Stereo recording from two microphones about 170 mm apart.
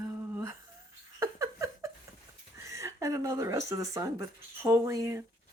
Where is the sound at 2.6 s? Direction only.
20° right (ahead or behind).